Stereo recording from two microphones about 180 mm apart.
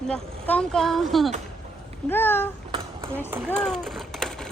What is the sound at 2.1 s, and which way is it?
Speech, 10° left (ahead or behind).